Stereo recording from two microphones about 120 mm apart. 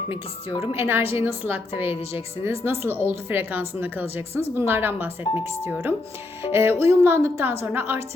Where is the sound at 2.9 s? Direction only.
15° right (ahead or behind).